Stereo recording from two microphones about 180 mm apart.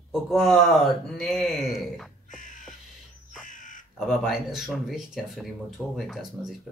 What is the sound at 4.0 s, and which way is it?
Speech, centre (ahead or behind).